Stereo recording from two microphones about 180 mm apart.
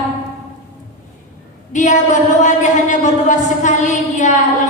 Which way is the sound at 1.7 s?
40° left (ahead or behind).